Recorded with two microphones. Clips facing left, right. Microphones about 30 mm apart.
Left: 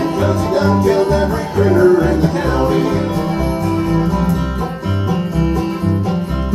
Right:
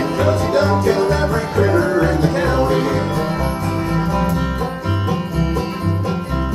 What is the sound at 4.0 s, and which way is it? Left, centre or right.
Music, right.